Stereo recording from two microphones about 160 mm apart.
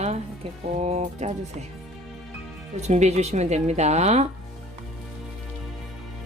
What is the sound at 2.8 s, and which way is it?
Speech, 45° right (ahead or behind).